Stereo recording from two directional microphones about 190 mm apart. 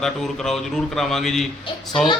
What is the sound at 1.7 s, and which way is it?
Speech, 25° left (ahead or behind).